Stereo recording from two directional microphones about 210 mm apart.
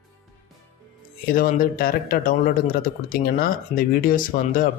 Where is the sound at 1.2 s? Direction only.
40° left (ahead or behind).